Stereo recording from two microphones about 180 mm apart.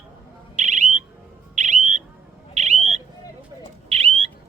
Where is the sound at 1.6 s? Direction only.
40° right (ahead or behind).